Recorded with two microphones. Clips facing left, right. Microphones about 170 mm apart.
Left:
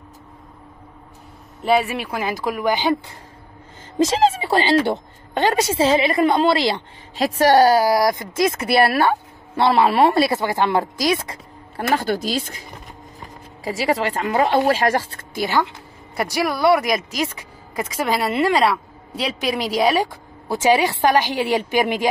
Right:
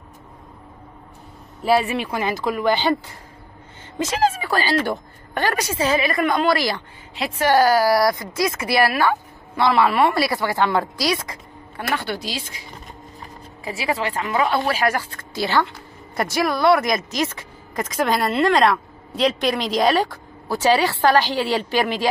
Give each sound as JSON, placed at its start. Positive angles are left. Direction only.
{"t": 1.8, "sound": "speech", "side_deg": 5}
{"t": 4.0, "sound": "a woman's voice", "side_deg": 25}
{"t": 7.2, "sound": "a woman's voice", "side_deg": 35}
{"t": 11.7, "sound": "speech", "side_deg": 40}
{"t": 13.7, "sound": "speech", "side_deg": 40}
{"t": 15.3, "sound": "speech", "side_deg": 15}
{"t": 20.1, "sound": "a woman's voice", "side_deg": 20}